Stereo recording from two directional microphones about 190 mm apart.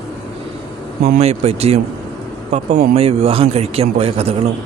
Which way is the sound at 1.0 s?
35° right (ahead or behind).